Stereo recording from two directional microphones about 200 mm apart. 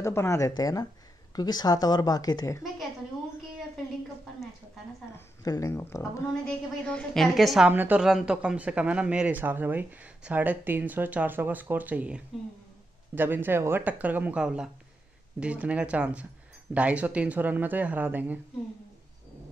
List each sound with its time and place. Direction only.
0.0 s a woman's voice: 15° left (ahead or behind)
5.1 s a woman's voice: 15° left (ahead or behind); by 18.4 s 10° right (ahead or behind)